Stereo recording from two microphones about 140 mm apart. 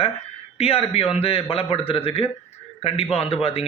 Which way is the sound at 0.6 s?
45° left (ahead or behind).